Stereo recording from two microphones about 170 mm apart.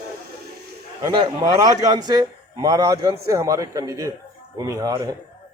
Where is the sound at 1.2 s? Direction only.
25° right (ahead or behind).